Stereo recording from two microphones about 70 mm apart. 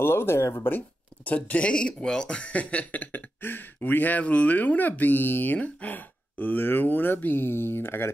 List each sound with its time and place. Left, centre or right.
0.0 s speech: left
0.7 s speech: left